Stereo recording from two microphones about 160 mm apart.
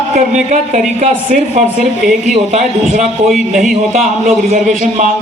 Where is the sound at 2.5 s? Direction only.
45° right (ahead or behind).